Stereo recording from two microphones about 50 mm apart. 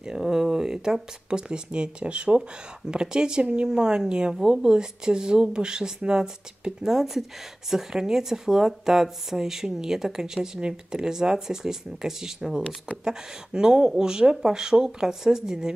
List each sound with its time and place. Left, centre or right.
0.0 s speech: centre